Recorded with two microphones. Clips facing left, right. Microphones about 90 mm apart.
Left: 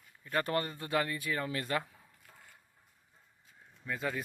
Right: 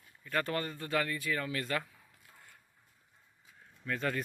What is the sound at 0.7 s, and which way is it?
Speech, 20° left (ahead or behind).